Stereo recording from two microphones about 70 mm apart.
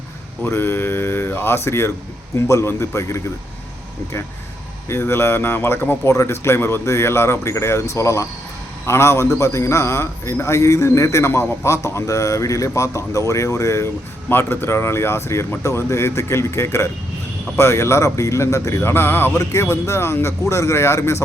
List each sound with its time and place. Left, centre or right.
0.4 s a man's voice: left
4.9 s a man's voice: left
14.3 s a man's voice: left
18.8 s a man's voice: left